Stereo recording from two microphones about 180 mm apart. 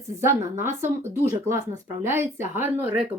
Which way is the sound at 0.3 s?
15° right (ahead or behind).